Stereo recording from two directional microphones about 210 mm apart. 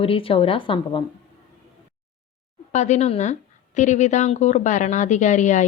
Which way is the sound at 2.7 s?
35° left (ahead or behind).